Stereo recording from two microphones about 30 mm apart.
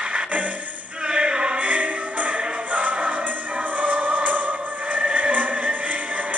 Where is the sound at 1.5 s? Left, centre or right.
Right.